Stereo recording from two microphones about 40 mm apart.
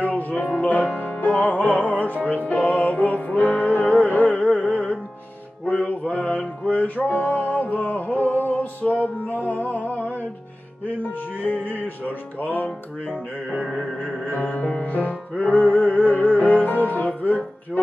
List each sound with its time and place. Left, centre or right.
0.0 s music: left
11.6 s music: left
14.5 s music: left